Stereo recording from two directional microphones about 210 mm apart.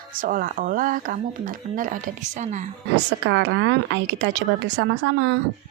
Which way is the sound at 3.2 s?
55° right (ahead or behind).